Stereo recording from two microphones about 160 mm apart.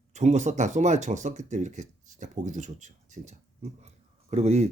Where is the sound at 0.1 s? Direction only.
45° right (ahead or behind).